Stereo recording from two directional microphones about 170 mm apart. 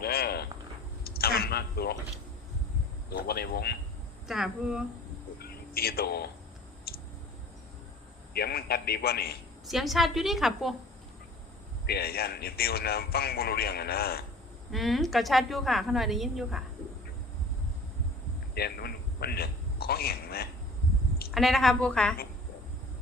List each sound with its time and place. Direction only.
0.0 s insect: 65° left (ahead or behind)
1.0 s a sound: 65° left (ahead or behind)
3.1 s speech: 65° left (ahead or behind)
4.3 s a woman's voice: 5° right (ahead or behind)
5.4 s a sound: 65° left (ahead or behind)
8.3 s a man's voice: 65° left (ahead or behind)
9.6 s a woman's voice: centre (ahead or behind)
11.9 s a man's voice: 65° left (ahead or behind)
14.7 s a woman's voice: centre (ahead or behind)
18.5 s a man's voice: 65° left (ahead or behind)
21.3 s a woman's voice: centre (ahead or behind)